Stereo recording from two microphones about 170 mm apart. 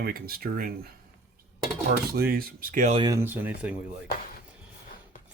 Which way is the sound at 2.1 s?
60° right (ahead or behind).